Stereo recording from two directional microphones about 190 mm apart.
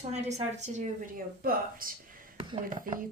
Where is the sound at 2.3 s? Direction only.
25° right (ahead or behind).